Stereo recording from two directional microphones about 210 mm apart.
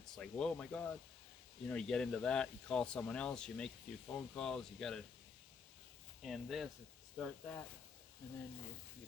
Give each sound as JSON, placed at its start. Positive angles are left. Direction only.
{"t": 0.0, "sound": "speech", "side_deg": 5}
{"t": 6.2, "sound": "speech", "side_deg": 0}